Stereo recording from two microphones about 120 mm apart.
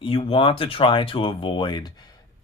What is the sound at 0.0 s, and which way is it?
Speech, 50° left (ahead or behind).